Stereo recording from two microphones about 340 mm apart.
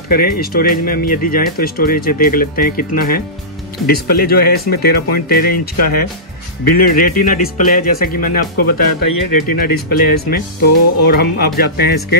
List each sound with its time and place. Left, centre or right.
0.1 s speech: left
8.8 s speech: left
11.1 s speech: left
11.7 s speech: left